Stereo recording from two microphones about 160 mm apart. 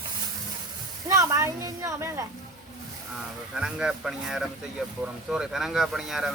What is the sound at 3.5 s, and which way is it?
Speech, 5° right (ahead or behind).